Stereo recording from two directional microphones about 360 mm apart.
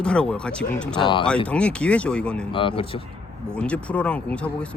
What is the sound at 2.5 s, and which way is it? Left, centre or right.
Speech, centre.